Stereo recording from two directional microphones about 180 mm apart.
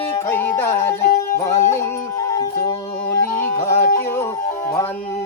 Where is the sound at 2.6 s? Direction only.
15° left (ahead or behind).